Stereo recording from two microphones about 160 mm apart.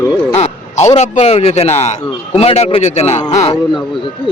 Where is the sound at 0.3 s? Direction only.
45° left (ahead or behind).